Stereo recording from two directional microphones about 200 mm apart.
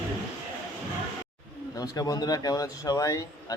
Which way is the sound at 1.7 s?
20° left (ahead or behind).